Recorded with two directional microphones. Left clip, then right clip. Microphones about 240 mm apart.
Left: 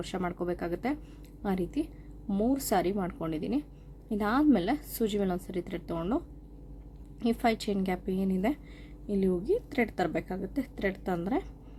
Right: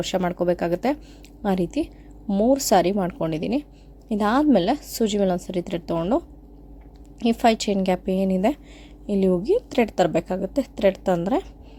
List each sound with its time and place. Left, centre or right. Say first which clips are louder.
0.0 s a woman's voice: right 11 dB; right